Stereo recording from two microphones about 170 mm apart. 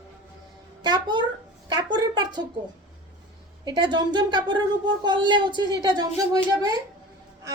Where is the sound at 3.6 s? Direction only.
25° right (ahead or behind).